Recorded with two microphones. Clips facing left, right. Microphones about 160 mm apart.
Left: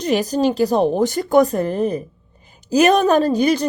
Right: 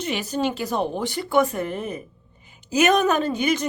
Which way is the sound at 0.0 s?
40° left (ahead or behind).